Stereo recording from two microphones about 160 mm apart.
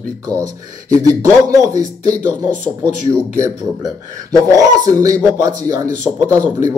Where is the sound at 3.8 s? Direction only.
20° right (ahead or behind).